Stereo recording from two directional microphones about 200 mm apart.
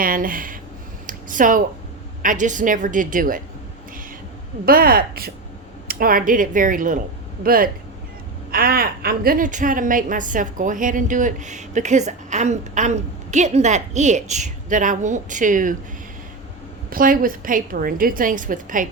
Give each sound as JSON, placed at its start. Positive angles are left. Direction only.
{"t": 0.0, "sound": "a woman's voice", "side_deg": -45}
{"t": 1.0, "sound": "a sound", "side_deg": -40}
{"t": 2.2, "sound": "a woman's voice", "side_deg": -40}
{"t": 4.6, "sound": "a woman's voice", "side_deg": -45}
{"t": 16.9, "sound": "a woman's voice", "side_deg": -45}